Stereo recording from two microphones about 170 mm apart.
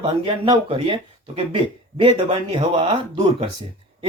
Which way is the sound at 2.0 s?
30° right (ahead or behind).